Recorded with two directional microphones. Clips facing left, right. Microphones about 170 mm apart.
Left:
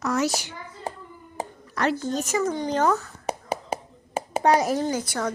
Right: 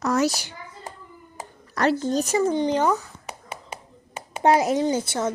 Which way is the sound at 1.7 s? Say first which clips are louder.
Right 3 dB; 35° right (ahead or behind).